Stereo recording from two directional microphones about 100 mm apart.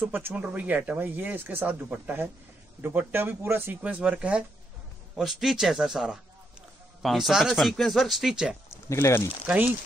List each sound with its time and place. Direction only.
0.0 s speech: 20° right (ahead or behind); by 8.5 s 5° right (ahead or behind)
8.8 s speech: 30° left (ahead or behind)
9.5 s speech: 10° right (ahead or behind)